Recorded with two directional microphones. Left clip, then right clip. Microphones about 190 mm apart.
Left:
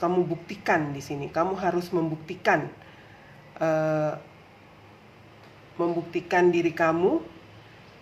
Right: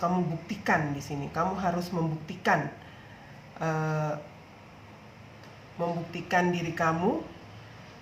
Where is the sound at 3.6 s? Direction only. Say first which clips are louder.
Left 7 dB; 50° left (ahead or behind).